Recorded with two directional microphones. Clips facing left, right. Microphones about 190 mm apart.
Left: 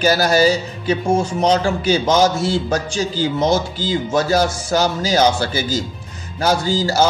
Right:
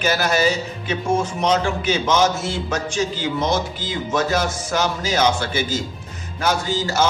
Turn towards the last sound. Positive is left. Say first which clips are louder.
# left 4 dB
turn(degrees=35)  # may be behind; listen again after turning